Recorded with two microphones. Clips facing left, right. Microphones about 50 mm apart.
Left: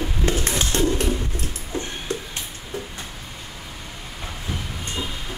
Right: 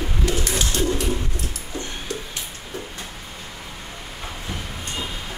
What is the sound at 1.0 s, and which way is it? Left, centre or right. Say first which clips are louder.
Music: left 1 dB; left.